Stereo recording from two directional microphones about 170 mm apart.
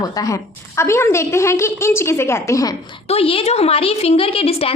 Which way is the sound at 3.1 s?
35° left (ahead or behind).